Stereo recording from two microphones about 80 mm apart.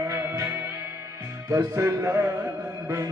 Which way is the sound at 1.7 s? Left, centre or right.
Right.